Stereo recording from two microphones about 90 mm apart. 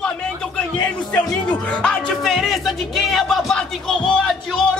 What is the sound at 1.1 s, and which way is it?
Speech, 10° left (ahead or behind).